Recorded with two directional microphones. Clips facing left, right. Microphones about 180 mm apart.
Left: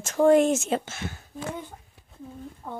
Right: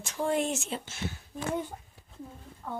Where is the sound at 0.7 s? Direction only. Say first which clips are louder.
Left 9 dB; 90° left.